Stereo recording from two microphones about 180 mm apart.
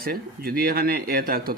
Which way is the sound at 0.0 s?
55° right (ahead or behind).